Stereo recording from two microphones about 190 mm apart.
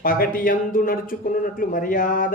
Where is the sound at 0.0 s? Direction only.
50° left (ahead or behind).